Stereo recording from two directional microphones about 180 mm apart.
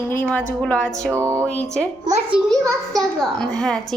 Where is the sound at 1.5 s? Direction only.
5° left (ahead or behind).